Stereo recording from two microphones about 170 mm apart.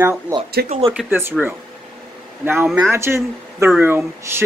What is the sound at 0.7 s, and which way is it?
Speech, 35° right (ahead or behind).